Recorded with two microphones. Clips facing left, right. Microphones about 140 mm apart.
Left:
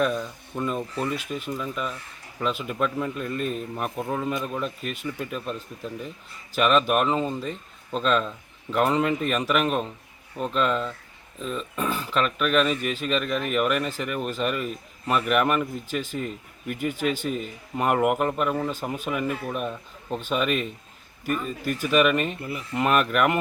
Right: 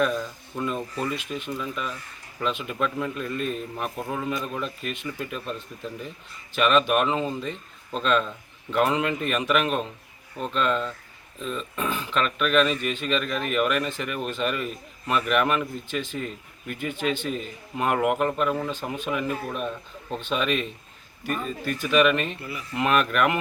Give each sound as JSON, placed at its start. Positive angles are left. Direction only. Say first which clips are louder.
{"t": 0.6, "sound": "speech", "louder": "left 1 dB", "side_deg": 0}
{"t": 22.4, "sound": "speech", "louder": "left 3 dB", "side_deg": 50}
{"t": 22.7, "sound": "speech", "louder": "left 1 dB", "side_deg": 0}